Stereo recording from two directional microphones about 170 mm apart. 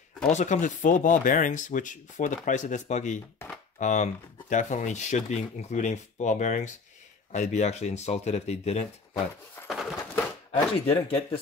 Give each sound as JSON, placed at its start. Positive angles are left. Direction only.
{"t": 0.3, "sound": "speech", "side_deg": 45}
{"t": 9.7, "sound": "a sound", "side_deg": 0}
{"t": 10.5, "sound": "speech", "side_deg": 35}